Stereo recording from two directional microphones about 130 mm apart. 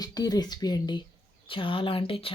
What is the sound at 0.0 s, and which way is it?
Speech, 30° left (ahead or behind).